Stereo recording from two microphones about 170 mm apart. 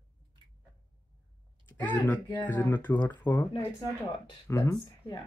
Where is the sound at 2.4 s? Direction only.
10° left (ahead or behind).